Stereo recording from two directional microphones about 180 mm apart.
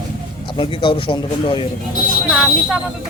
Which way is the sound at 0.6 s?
25° left (ahead or behind).